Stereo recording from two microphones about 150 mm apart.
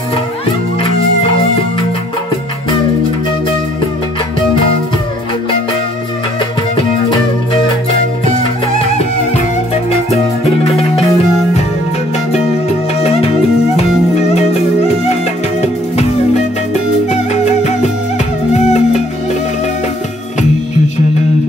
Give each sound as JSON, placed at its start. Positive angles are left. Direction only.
{"t": 6.8, "sound": "music", "side_deg": 35}
{"t": 17.1, "sound": "music", "side_deg": 50}